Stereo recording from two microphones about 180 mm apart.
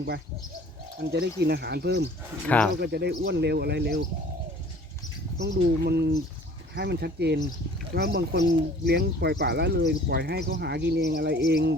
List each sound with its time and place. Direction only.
1.0 s speech: 65° right (ahead or behind)
2.5 s speech: 10° left (ahead or behind)
2.8 s speech: 65° right (ahead or behind)
5.4 s speech: 70° right (ahead or behind)